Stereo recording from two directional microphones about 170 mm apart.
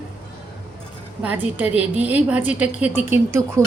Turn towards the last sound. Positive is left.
turn(degrees=-15)  # may be behind; listen again after turning